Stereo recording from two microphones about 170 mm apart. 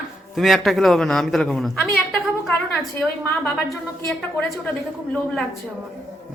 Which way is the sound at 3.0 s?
5° left (ahead or behind).